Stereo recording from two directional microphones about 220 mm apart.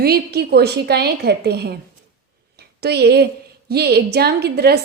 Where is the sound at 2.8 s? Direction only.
50° right (ahead or behind).